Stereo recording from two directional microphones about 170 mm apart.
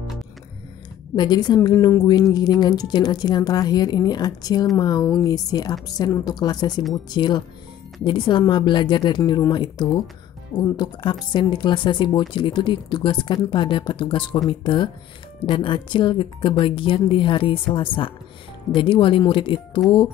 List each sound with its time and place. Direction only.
1.1 s a woman's voice: 25° left (ahead or behind)